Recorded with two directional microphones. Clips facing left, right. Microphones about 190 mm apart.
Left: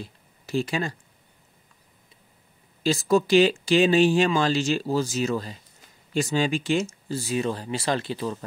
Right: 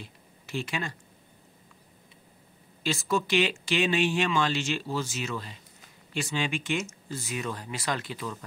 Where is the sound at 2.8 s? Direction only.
35° left (ahead or behind).